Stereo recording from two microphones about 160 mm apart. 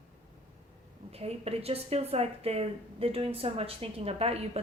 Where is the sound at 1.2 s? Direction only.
40° right (ahead or behind).